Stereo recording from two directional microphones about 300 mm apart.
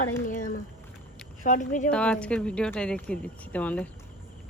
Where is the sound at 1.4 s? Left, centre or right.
Left.